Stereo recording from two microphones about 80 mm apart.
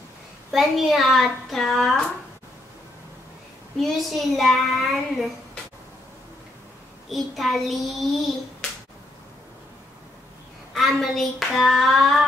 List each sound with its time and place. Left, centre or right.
0.5 s child singing: centre
3.7 s child singing: centre
7.1 s child singing: centre
10.7 s child singing: centre